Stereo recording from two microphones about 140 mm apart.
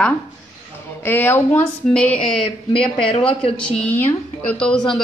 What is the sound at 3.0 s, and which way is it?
Speech, 40° left (ahead or behind).